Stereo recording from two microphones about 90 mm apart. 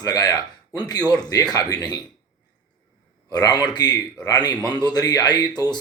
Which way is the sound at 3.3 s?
45° left (ahead or behind).